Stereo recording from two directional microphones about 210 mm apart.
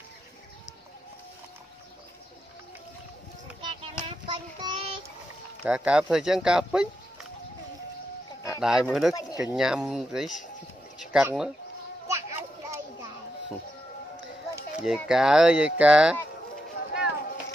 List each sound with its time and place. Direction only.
3.6 s child singing: 25° right (ahead or behind)
5.6 s speech: 5° right (ahead or behind)
8.5 s speech: 5° right (ahead or behind)
12.1 s children playing: 15° right (ahead or behind)
14.5 s a sound: 5° right (ahead or behind)
15.0 s speech: 5° right (ahead or behind)